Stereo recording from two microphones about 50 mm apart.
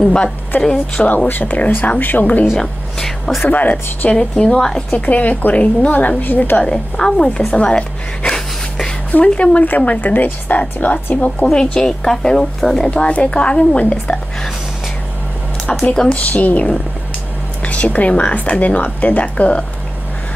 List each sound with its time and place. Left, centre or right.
0.0 s a woman's voice: centre
1.0 s a woman's voice: left
2.5 s a woman's voice: centre
3.4 s a woman's voice: left
4.1 s a woman's voice: centre
4.9 s a woman's voice: left
6.6 s a woman's voice: centre; by 11.4 s left
11.5 s a woman's voice: centre
12.9 s speech: left
15.9 s a woman's voice: centre
16.2 s speech: left